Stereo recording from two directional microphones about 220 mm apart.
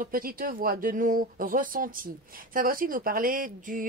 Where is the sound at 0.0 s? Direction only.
40° right (ahead or behind).